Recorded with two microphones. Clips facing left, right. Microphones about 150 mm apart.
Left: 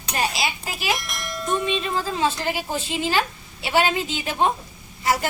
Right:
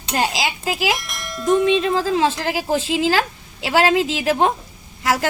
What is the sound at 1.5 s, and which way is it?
A woman's voice, 90° right.